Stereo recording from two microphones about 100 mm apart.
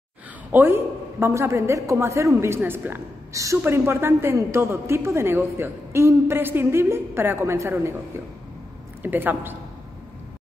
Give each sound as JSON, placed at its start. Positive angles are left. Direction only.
{"t": 0.5, "sound": "a woman's voice", "side_deg": -20}
{"t": 9.0, "sound": "a woman's voice", "side_deg": -20}